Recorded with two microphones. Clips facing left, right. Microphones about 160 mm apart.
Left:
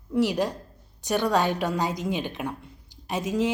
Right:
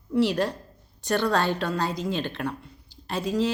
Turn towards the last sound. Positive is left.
turn(degrees=15)  # may be behind; listen again after turning